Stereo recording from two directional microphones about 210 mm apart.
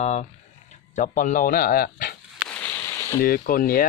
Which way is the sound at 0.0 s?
35° left (ahead or behind).